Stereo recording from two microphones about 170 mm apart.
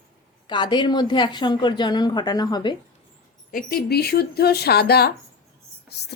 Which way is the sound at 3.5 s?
60° left (ahead or behind).